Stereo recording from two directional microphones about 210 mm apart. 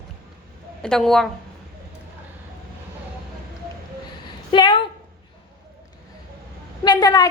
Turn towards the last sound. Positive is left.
turn(degrees=20)  # may be behind; listen again after turning